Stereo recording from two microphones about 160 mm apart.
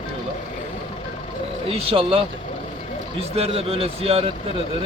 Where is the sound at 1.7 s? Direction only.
35° right (ahead or behind).